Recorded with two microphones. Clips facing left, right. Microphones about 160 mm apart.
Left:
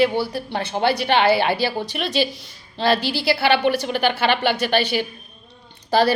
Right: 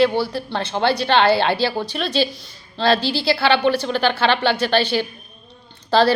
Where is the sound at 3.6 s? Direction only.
15° left (ahead or behind).